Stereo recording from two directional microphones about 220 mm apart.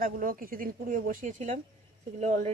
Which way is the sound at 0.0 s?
40° right (ahead or behind).